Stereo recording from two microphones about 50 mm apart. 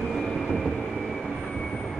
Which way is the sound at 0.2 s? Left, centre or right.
Centre.